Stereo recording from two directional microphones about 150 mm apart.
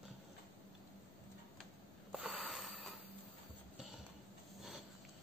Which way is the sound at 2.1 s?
5° right (ahead or behind).